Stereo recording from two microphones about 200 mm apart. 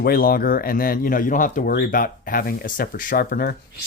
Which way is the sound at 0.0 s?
50° left (ahead or behind).